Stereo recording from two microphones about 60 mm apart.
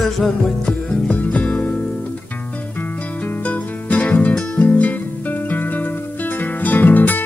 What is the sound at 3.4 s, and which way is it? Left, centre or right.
Music, left.